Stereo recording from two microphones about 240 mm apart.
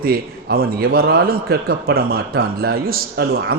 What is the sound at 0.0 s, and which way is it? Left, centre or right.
A man's voice, right.